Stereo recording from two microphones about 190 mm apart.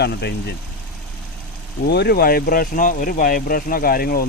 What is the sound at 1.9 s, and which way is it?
Speech, 60° left (ahead or behind).